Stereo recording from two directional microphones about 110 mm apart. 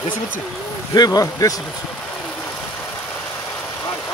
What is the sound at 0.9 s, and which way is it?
Speech, 35° left (ahead or behind).